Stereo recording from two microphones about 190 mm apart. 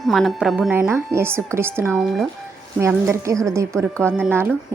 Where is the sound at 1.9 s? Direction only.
Centre (ahead or behind).